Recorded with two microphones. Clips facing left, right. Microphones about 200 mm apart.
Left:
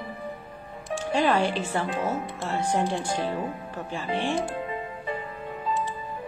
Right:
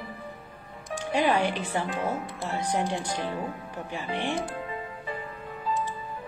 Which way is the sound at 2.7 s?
15° right (ahead or behind).